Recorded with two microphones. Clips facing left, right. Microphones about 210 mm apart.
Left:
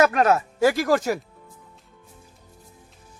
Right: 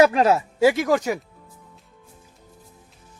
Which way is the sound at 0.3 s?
10° right (ahead or behind).